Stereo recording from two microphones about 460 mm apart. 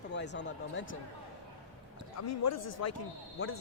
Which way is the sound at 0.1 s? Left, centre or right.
Left.